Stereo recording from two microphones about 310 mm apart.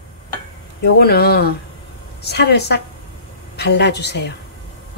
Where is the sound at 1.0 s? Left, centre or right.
Left.